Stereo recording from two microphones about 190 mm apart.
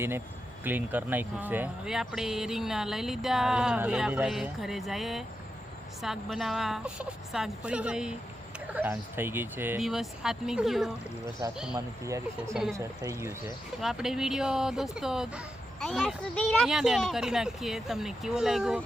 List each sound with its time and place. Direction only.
0.6 s speech: 10° right (ahead or behind)
11.7 s speech: 15° right (ahead or behind)
13.8 s speech: centre (ahead or behind)